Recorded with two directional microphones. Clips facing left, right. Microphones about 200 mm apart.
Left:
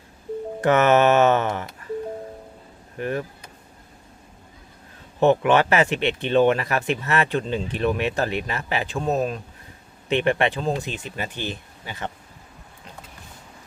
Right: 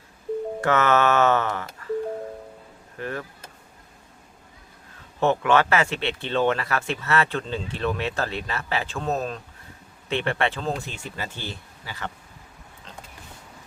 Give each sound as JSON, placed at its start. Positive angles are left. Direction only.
{"t": 0.6, "sound": "speech", "side_deg": 20}
{"t": 3.0, "sound": "speech", "side_deg": 20}
{"t": 5.2, "sound": "speech", "side_deg": 15}